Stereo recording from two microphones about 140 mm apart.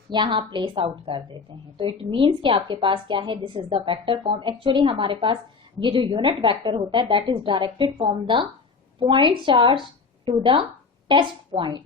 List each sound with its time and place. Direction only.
0.1 s a woman's voice: 35° right (ahead or behind)